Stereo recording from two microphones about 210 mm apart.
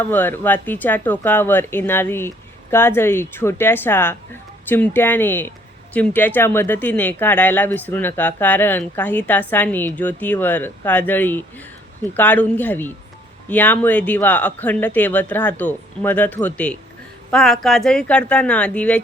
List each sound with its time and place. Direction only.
0.0 s speech: 10° left (ahead or behind)